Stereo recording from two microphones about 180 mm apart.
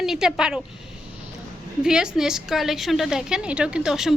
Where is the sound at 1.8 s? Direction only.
5° right (ahead or behind).